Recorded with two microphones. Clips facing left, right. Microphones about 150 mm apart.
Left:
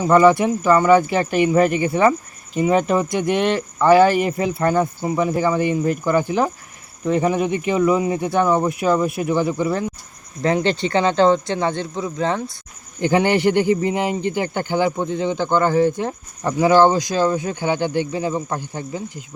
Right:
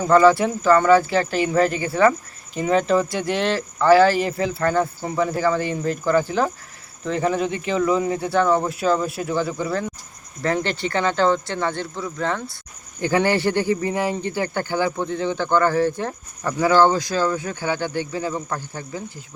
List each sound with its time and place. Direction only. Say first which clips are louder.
0.0 s speech: left 1 dB; 20° left (ahead or behind)